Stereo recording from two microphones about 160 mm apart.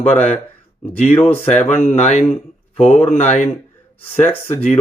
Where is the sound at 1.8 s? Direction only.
45° left (ahead or behind).